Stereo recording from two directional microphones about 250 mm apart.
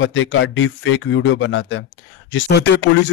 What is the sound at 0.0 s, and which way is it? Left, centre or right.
A man's voice, left.